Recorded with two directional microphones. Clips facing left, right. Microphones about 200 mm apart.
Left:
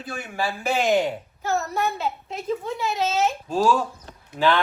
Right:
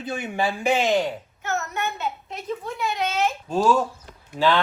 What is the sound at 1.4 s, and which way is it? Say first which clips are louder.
A woman's voice: left 4 dB; 35° left (ahead or behind).